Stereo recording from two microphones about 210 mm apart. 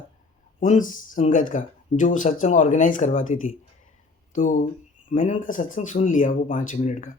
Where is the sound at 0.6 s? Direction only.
40° left (ahead or behind).